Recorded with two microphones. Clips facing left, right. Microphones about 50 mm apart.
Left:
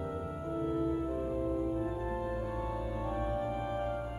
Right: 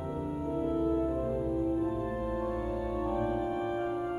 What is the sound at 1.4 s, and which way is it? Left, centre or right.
Music, centre.